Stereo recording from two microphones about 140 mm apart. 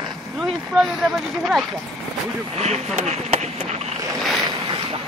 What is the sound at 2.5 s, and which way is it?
Speech, 50° right (ahead or behind).